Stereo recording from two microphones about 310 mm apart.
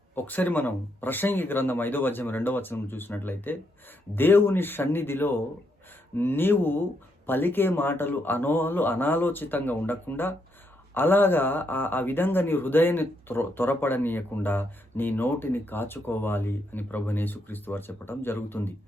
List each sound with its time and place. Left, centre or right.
0.3 s speech: centre